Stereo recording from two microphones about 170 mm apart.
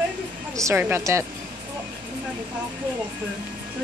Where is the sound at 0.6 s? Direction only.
15° right (ahead or behind).